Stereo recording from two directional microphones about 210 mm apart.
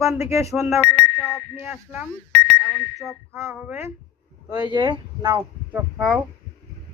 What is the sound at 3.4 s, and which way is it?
Speech, 10° right (ahead or behind).